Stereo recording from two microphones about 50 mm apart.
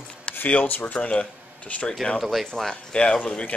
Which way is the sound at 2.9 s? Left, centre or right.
Centre.